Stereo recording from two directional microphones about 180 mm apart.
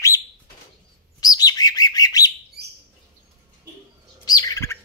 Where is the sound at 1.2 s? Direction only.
20° left (ahead or behind).